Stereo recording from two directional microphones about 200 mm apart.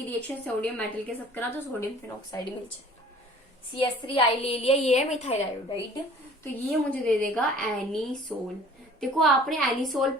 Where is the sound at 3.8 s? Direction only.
25° left (ahead or behind).